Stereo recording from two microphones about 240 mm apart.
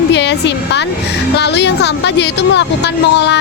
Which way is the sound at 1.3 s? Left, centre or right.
Left.